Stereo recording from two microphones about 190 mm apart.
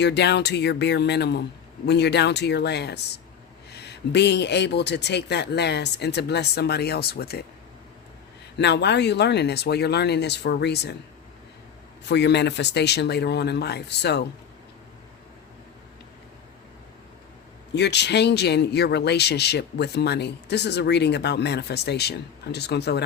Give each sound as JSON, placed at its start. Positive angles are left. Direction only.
{"t": 0.0, "sound": "speech", "side_deg": 65}
{"t": 8.5, "sound": "speech", "side_deg": 65}
{"t": 12.0, "sound": "speech", "side_deg": 65}
{"t": 17.7, "sound": "speech", "side_deg": 65}